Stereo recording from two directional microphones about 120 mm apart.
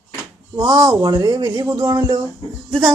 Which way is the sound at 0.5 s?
35° right (ahead or behind).